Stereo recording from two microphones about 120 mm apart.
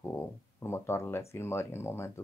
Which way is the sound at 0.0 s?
20° left (ahead or behind).